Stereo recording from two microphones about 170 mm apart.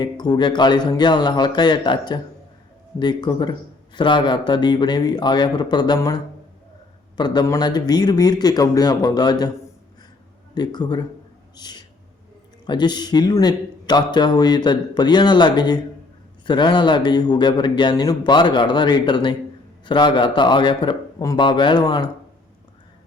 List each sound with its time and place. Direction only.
0.0 s a man's voice: 25° left (ahead or behind)
7.2 s a man's voice: 25° left (ahead or behind)
10.5 s a man's voice: 25° left (ahead or behind)